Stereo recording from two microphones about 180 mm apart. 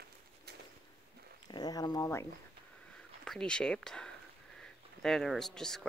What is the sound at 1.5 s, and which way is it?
Speech, 20° left (ahead or behind).